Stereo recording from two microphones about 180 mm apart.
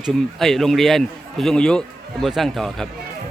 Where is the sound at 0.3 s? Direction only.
Centre (ahead or behind).